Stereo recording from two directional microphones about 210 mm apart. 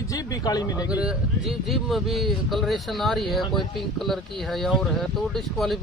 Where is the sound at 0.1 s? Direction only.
15° left (ahead or behind).